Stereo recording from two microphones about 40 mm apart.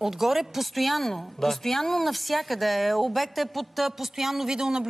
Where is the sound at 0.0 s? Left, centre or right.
Centre.